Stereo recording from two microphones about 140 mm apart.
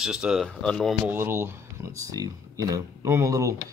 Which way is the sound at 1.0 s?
15° right (ahead or behind).